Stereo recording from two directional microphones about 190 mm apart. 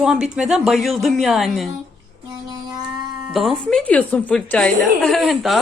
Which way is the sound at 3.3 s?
Centre (ahead or behind).